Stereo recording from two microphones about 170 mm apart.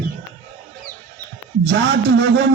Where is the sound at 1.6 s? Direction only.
90° right.